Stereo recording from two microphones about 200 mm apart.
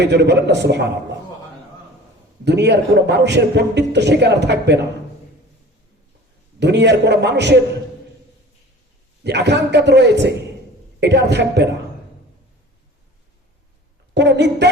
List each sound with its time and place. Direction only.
0.0 s a man's voice: 60° right (ahead or behind)
2.4 s a man's voice: 60° right (ahead or behind)
6.6 s a man's voice: 60° right (ahead or behind)
9.2 s a man's voice: 60° right (ahead or behind)
14.1 s a man's voice: 60° right (ahead or behind)